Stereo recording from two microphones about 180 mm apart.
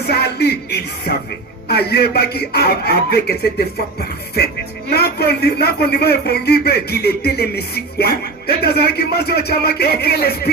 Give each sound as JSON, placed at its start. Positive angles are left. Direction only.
{"t": 0.1, "sound": "music", "side_deg": 65}
{"t": 1.6, "sound": "a man's voice", "side_deg": 65}
{"t": 4.4, "sound": "a man's voice", "side_deg": 60}